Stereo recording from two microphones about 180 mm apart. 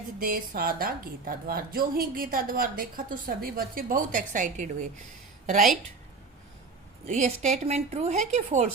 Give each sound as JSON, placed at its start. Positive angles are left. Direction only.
{"t": 0.2, "sound": "a woman's voice", "side_deg": -55}
{"t": 7.1, "sound": "speech", "side_deg": -40}